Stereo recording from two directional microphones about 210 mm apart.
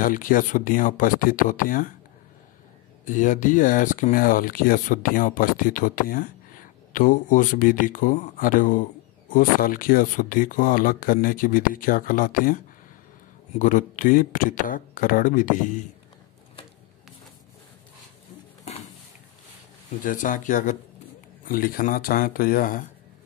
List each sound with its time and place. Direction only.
0.0 s speech: 40° left (ahead or behind)
3.1 s speech: 35° left (ahead or behind)
20.0 s speech: 40° left (ahead or behind)